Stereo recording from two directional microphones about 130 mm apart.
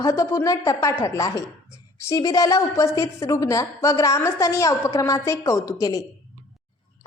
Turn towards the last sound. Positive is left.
turn(degrees=25)  # may be behind; listen again after turning